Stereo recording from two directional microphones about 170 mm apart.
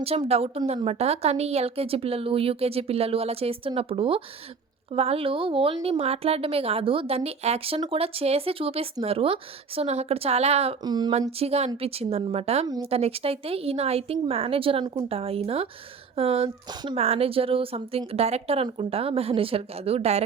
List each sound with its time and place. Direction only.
0.0 s a woman's voice: 35° right (ahead or behind)
10.8 s speech: 25° right (ahead or behind)
11.3 s a woman's voice: 35° right (ahead or behind)